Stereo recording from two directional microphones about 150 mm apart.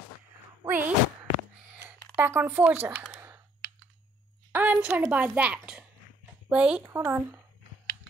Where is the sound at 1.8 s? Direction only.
15° right (ahead or behind).